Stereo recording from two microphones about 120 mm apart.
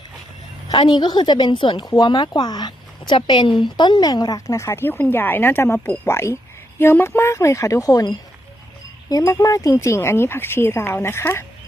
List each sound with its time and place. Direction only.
0.9 s speech: 35° left (ahead or behind)
1.8 s speech: 35° left (ahead or behind)